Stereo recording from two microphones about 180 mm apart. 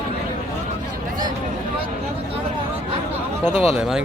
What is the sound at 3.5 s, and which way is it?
Speech, 35° left (ahead or behind).